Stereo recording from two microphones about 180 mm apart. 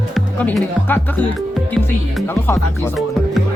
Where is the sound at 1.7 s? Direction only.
10° left (ahead or behind).